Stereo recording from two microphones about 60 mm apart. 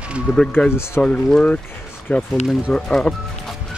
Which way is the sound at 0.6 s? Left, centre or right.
Centre.